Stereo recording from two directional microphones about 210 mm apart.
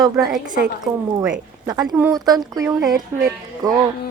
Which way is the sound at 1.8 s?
10° right (ahead or behind).